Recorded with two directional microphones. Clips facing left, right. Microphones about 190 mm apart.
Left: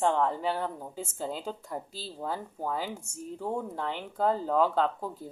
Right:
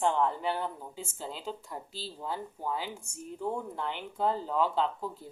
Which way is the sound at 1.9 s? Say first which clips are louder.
Even; 45° left (ahead or behind).